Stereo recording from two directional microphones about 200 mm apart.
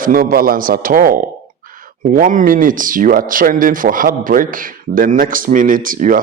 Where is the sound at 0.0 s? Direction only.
45° right (ahead or behind).